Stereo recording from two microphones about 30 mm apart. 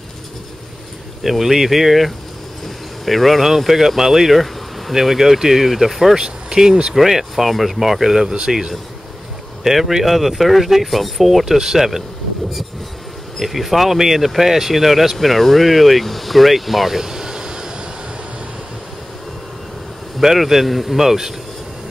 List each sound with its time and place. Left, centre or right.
1.2 s speech: centre
6.1 s speech: right
7.0 s speech: centre
9.6 s speech: centre
11.4 s speech: centre
13.4 s speech: centre; by 17.6 s right
20.2 s speech: centre